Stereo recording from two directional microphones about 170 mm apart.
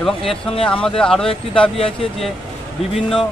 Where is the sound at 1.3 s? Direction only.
30° left (ahead or behind).